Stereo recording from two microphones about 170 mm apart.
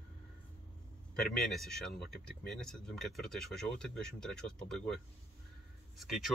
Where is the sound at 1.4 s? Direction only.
Centre (ahead or behind).